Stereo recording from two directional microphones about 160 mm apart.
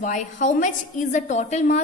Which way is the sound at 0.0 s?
50° left (ahead or behind).